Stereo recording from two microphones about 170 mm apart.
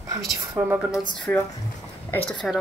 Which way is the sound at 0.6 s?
10° right (ahead or behind).